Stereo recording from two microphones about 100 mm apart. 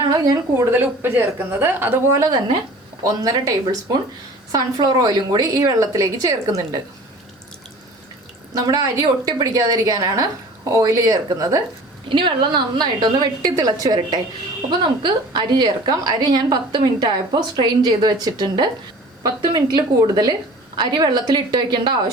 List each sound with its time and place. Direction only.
0.5 s a woman's voice: 25° right (ahead or behind)
2.1 s a woman's voice: 35° right (ahead or behind)
4.5 s a woman's voice: 40° right (ahead or behind)
8.5 s a woman's voice: 40° right (ahead or behind)
12.0 s a woman's voice: 55° right (ahead or behind)